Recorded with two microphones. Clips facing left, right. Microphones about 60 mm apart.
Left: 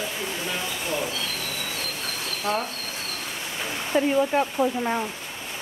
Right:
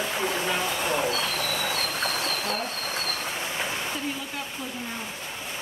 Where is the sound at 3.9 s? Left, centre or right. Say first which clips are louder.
Left 11 dB; left.